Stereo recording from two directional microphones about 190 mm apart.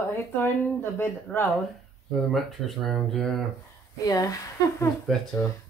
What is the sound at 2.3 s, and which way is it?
Speech, centre (ahead or behind).